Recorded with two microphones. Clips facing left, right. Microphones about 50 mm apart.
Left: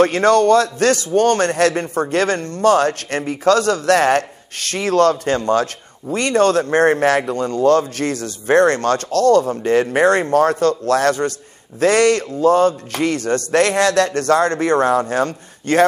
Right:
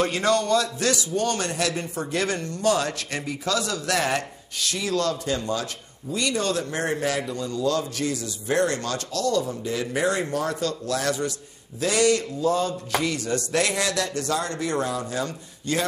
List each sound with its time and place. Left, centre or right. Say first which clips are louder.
0.0 s a man's voice: left 9 dB; left